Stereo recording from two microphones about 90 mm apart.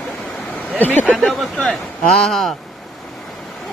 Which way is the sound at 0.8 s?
20° left (ahead or behind).